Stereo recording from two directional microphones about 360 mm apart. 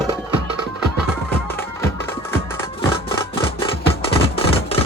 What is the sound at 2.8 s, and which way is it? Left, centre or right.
Music, centre.